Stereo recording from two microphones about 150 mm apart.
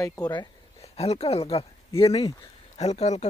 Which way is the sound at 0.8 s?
45° left (ahead or behind).